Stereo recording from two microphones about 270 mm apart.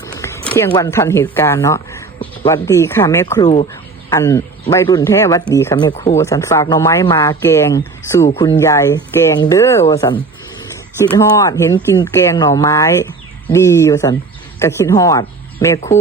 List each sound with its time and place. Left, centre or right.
0.0 s speech: centre
6.1 s speech: centre